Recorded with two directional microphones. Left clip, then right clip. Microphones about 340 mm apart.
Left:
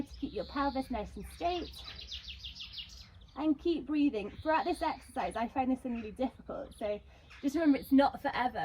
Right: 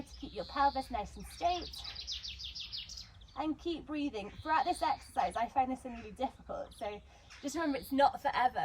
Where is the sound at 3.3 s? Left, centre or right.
Centre.